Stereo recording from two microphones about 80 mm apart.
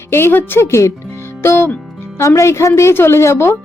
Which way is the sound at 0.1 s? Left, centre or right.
Left.